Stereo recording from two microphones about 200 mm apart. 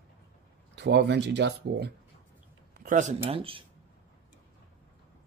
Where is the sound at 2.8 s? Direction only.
40° right (ahead or behind).